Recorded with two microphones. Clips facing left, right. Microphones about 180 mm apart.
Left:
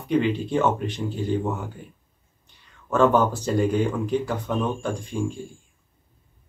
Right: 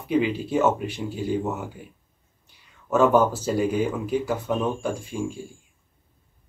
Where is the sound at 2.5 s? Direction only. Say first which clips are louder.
Left 1 dB; 10° right (ahead or behind).